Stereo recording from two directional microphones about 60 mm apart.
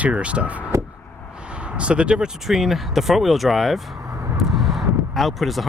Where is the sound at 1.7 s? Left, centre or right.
Centre.